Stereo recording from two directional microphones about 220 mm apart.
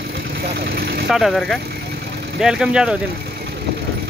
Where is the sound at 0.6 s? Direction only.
45° right (ahead or behind).